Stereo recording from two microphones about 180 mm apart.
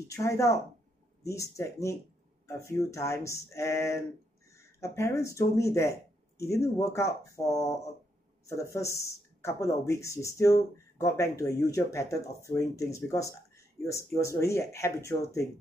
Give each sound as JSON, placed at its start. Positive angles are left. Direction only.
{"t": 0.1, "sound": "speech", "side_deg": 15}